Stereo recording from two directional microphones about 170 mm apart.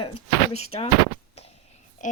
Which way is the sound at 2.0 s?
50° left (ahead or behind).